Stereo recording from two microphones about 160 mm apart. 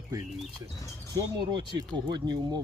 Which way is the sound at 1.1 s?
30° right (ahead or behind).